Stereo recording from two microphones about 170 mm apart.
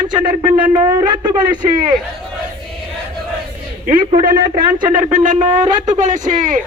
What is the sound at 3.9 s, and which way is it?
Speech, 30° right (ahead or behind).